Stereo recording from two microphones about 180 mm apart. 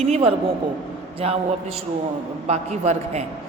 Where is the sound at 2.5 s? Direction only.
40° right (ahead or behind).